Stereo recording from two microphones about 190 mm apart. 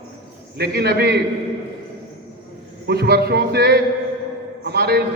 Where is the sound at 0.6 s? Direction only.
55° right (ahead or behind).